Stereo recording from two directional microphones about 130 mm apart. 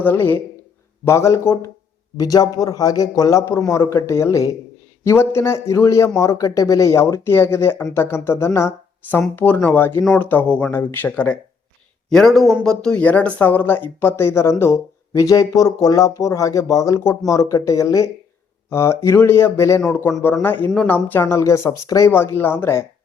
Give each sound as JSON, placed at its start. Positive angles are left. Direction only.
{"t": 0.0, "sound": "speech", "side_deg": 15}
{"t": 12.0, "sound": "a man's voice", "side_deg": 5}